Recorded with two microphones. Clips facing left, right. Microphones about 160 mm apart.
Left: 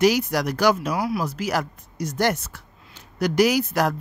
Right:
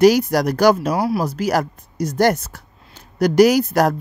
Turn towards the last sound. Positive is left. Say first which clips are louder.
# right 6 dB
turn(degrees=-40)  # may be behind; listen again after turning